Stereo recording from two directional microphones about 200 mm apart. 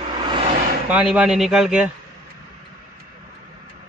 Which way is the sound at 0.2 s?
25° right (ahead or behind).